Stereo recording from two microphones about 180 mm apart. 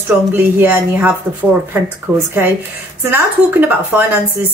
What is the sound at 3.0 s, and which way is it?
A woman's voice, 10° right (ahead or behind).